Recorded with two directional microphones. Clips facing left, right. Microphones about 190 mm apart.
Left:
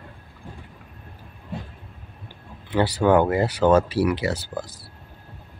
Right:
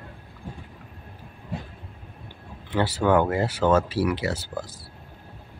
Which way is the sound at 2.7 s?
15° left (ahead or behind).